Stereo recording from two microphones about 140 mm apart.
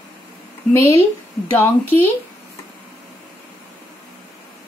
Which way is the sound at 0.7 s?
20° left (ahead or behind).